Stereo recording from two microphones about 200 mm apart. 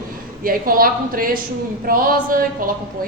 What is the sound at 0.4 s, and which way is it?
A woman's voice, 45° right (ahead or behind).